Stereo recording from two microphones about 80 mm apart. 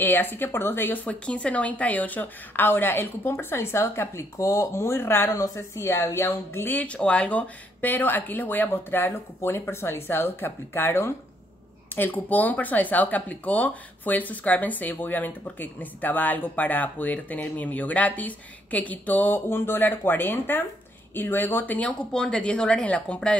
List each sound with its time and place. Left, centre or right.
0.0 s speech: left
5.3 s speech: left; by 23.3 s centre